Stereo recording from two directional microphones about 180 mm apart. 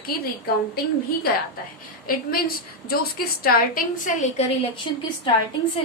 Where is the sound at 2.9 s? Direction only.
55° left (ahead or behind).